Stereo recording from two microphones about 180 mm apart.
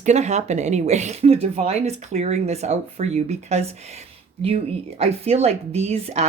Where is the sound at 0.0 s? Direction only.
40° right (ahead or behind).